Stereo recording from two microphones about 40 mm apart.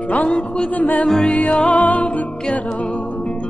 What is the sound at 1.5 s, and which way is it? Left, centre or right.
Music, left.